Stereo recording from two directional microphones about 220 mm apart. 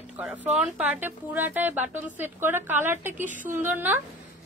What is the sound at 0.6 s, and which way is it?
A woman's voice, 5° right (ahead or behind).